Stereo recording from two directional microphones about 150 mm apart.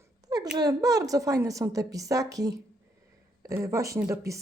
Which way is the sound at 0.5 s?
25° right (ahead or behind).